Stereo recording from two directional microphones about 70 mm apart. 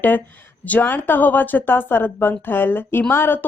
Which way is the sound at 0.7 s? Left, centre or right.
Left.